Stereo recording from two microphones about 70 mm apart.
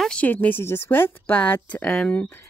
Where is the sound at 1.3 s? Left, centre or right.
Left.